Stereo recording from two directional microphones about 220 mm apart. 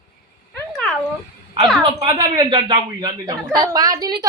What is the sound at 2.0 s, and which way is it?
A woman's voice, 20° right (ahead or behind).